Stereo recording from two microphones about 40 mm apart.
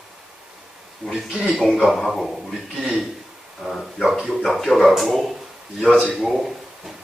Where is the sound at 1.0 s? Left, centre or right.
Left.